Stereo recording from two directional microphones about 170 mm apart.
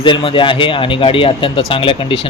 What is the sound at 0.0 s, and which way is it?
Speech, 30° left (ahead or behind).